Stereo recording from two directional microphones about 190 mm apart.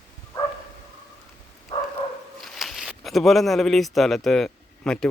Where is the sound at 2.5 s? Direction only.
Centre (ahead or behind).